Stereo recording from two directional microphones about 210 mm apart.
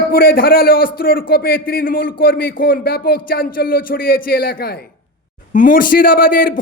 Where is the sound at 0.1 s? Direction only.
45° left (ahead or behind).